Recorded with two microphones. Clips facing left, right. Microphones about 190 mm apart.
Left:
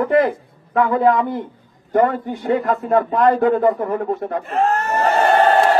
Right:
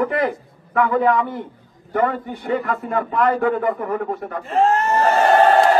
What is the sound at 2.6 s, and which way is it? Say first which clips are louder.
A man's voice: left 5 dB; 35° left (ahead or behind).